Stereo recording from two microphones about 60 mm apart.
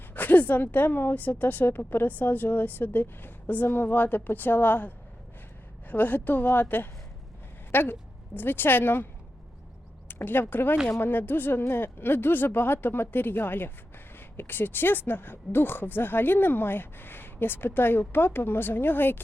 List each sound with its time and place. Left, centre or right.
0.1 s a woman's voice: left
10.1 s speech: left